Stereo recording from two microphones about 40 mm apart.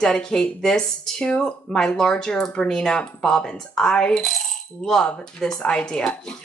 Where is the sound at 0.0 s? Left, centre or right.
Centre.